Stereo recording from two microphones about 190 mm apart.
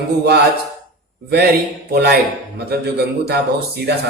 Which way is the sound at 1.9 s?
55° right (ahead or behind).